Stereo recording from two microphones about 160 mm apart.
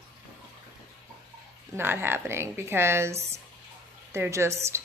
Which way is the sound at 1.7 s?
15° right (ahead or behind).